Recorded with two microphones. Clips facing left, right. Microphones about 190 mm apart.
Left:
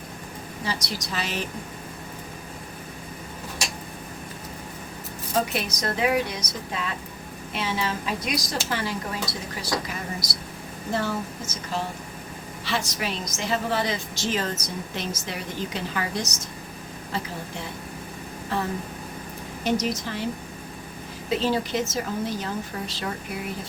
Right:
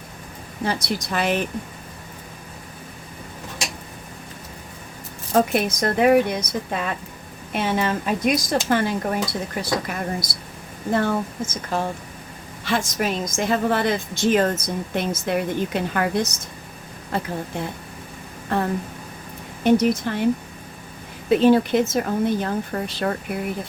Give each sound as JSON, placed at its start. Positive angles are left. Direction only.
{"t": 0.6, "sound": "a woman's voice", "side_deg": -55}
{"t": 5.3, "sound": "a woman's voice", "side_deg": -50}
{"t": 21.2, "sound": "a woman's voice", "side_deg": -55}